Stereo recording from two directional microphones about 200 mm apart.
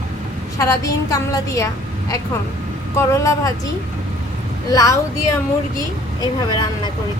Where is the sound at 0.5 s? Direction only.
15° left (ahead or behind).